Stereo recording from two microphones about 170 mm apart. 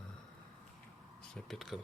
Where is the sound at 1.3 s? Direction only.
Centre (ahead or behind).